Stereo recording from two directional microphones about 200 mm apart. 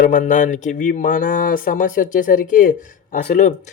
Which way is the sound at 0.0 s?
40° left (ahead or behind).